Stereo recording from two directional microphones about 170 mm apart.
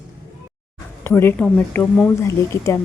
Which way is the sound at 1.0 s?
15° left (ahead or behind).